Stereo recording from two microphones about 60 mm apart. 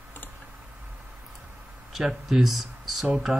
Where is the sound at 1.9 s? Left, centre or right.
Centre.